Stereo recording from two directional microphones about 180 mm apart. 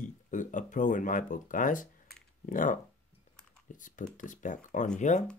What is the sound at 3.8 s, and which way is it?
Speech, 45° left (ahead or behind).